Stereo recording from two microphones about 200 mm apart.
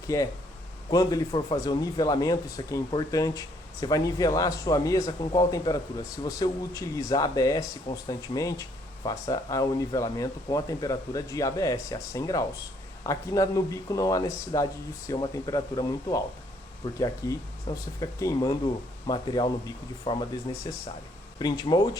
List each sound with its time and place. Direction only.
0.1 s speech: 15° left (ahead or behind)